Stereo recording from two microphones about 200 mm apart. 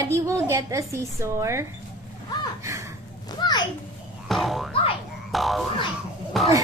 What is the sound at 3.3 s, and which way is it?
Children playing, 20° left (ahead or behind).